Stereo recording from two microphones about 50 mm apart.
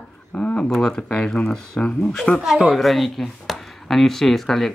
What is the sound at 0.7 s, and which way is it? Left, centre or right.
Speech, centre.